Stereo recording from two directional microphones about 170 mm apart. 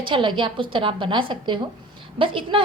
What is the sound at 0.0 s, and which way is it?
A woman's voice, 30° right (ahead or behind).